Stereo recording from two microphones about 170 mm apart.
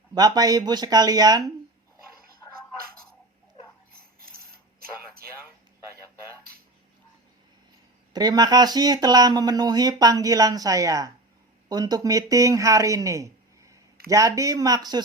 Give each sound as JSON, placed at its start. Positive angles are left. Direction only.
{"t": 0.1, "sound": "speech", "side_deg": -25}
{"t": 8.1, "sound": "speech", "side_deg": -25}